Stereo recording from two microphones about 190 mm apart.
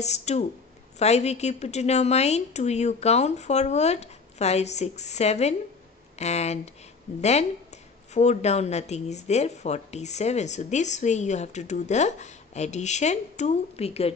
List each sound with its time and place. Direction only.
0.0 s speech: 35° left (ahead or behind)